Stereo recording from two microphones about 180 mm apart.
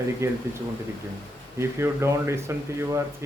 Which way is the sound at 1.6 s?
15° right (ahead or behind).